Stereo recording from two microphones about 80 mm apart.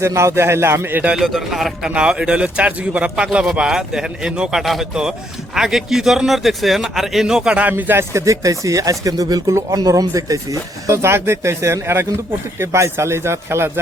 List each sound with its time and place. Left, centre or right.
0.0 s speech: right
1.1 s a man's voice: centre
1.9 s a man's voice: centre
7.7 s a man's voice: right
8.1 s speech: right
10.8 s speech: right